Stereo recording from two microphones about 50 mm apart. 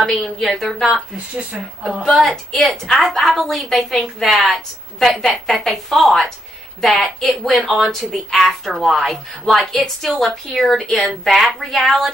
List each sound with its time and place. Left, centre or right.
0.0 s speech: centre
1.1 s speech: right
1.6 s a woman's voice: centre
2.2 s a woman's voice: centre